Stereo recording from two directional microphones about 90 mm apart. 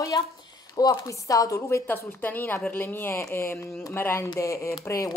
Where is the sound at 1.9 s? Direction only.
20° left (ahead or behind).